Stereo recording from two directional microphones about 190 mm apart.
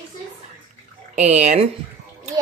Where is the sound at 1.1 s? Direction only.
35° right (ahead or behind).